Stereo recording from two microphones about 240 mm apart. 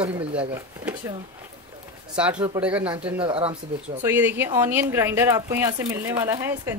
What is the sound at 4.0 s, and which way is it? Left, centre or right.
Speech, centre.